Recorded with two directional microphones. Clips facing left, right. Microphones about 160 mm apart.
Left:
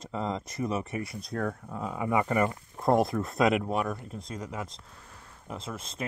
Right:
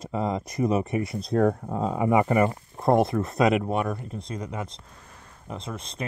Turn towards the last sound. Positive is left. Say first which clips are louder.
# right 3 dB
turn(degrees=5)  # may be behind; listen again after turning